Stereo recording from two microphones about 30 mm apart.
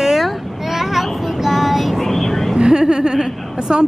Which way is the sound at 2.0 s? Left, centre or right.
Centre.